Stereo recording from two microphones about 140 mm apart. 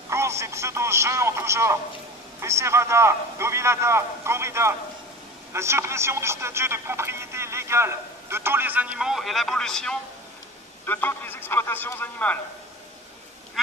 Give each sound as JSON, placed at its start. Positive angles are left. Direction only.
{"t": 0.1, "sound": "a man's voice", "side_deg": -20}